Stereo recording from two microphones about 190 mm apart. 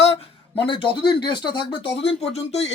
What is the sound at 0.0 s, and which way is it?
Speech, 30° left (ahead or behind).